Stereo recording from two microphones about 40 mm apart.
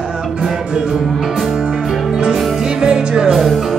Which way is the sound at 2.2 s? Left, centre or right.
Centre.